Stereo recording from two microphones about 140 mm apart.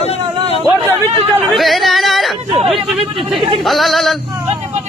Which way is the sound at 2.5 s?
45° right (ahead or behind).